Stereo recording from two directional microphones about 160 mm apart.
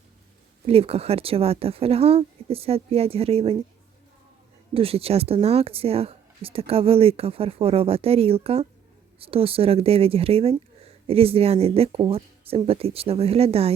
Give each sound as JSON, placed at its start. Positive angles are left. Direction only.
{"t": 0.6, "sound": "speech", "side_deg": -35}
{"t": 4.7, "sound": "speech", "side_deg": -35}